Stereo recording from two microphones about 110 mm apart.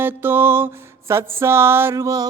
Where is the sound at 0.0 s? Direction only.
20° right (ahead or behind).